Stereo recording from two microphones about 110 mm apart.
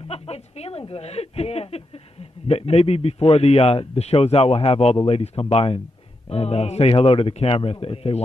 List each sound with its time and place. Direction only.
0.1 s a man's voice: 65° left (ahead or behind)